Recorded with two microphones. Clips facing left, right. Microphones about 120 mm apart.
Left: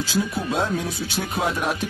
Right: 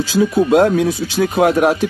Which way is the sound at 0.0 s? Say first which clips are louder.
Right 10 dB; 90° right.